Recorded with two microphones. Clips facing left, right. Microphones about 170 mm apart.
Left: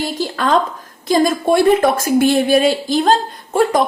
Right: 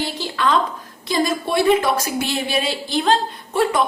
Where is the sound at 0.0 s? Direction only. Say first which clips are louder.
Left 3 dB; 45° left (ahead or behind).